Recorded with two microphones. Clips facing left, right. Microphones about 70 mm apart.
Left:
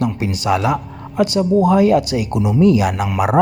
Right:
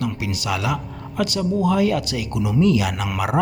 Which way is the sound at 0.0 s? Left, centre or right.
Left.